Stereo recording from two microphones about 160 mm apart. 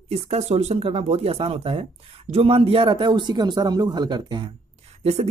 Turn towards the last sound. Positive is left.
turn(degrees=-40)  # may be behind; listen again after turning